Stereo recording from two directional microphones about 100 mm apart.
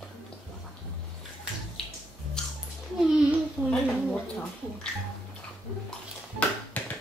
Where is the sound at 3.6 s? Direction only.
10° left (ahead or behind).